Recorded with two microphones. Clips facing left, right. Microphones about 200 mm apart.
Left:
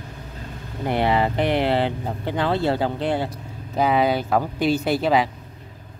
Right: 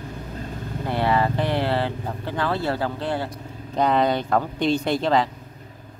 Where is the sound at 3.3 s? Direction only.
5° left (ahead or behind).